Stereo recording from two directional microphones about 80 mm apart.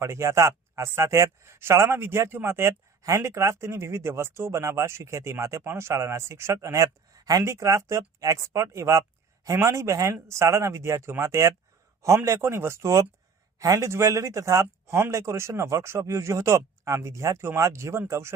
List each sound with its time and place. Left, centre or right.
0.0 s speech: right